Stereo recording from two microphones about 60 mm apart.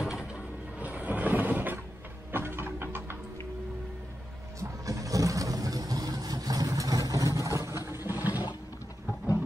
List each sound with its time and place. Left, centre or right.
0.3 s vehicle: right
2.3 s mechanisms: right
4.6 s vehicle: right
7.9 s water: right